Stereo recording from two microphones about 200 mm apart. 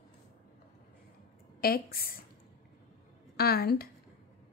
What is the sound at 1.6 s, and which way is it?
Speech, 50° left (ahead or behind).